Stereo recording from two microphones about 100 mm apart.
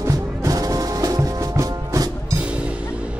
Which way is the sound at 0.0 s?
30° right (ahead or behind).